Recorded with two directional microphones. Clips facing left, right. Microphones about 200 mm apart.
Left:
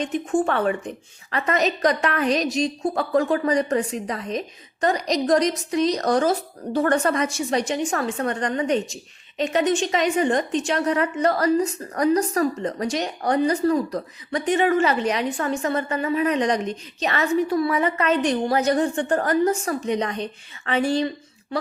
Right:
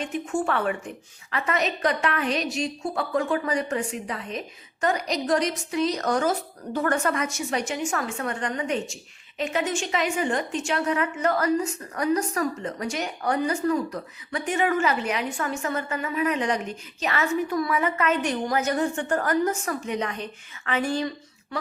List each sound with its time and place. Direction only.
0.0 s a woman's voice: 35° left (ahead or behind)